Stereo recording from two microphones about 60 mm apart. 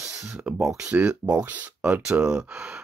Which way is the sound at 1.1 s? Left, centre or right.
Centre.